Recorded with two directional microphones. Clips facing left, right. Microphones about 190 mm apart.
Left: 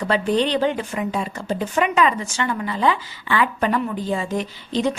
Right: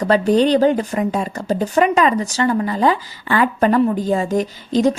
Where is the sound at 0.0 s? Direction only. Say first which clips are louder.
Right 6 dB; 40° right (ahead or behind).